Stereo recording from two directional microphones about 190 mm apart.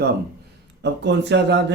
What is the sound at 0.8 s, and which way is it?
Speech, 65° right (ahead or behind).